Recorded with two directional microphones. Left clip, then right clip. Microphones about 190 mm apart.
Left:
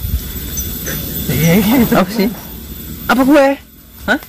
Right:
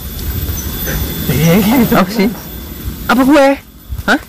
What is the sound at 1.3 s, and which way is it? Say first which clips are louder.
Speech: right 1 dB; 5° right (ahead or behind).